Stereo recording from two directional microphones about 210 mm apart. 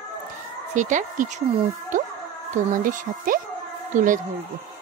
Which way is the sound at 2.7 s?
40° right (ahead or behind).